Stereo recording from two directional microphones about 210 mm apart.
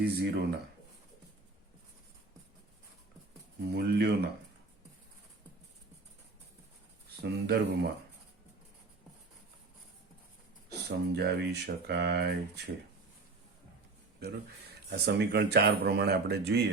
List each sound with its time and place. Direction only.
0.0 s speech: 50° right (ahead or behind)
3.8 s speech: 50° right (ahead or behind)
7.2 s speech: 50° right (ahead or behind)
10.7 s speech: 50° right (ahead or behind)
14.2 s speech: 50° right (ahead or behind)